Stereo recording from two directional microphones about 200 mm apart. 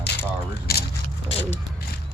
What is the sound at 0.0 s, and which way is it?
Coin, 55° left (ahead or behind).